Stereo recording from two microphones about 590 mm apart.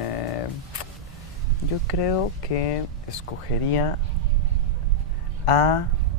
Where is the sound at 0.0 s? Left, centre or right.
Left.